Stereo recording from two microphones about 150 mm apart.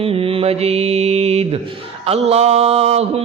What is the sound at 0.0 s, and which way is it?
Mantra, 40° right (ahead or behind).